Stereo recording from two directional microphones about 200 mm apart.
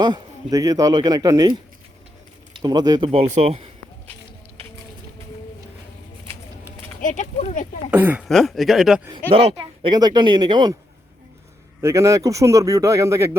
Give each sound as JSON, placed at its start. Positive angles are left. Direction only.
{"t": 0.0, "sound": "speech", "side_deg": -20}
{"t": 7.0, "sound": "speech", "side_deg": 40}
{"t": 7.9, "sound": "speech", "side_deg": -10}
{"t": 9.3, "sound": "speech", "side_deg": -30}
{"t": 11.8, "sound": "speech", "side_deg": -15}